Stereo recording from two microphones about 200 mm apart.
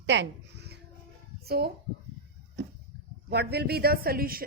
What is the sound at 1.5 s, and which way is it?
Speech, 50° right (ahead or behind).